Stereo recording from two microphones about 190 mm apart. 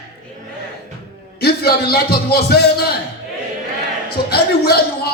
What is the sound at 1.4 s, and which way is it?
Speech, 55° left (ahead or behind).